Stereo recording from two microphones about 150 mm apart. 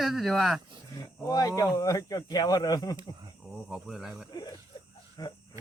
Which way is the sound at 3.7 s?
Centre (ahead or behind).